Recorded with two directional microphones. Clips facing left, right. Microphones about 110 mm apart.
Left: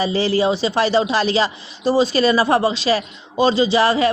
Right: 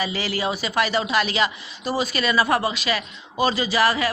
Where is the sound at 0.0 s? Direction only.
30° left (ahead or behind).